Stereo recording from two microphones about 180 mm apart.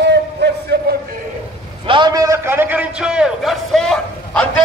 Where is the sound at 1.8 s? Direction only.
25° right (ahead or behind).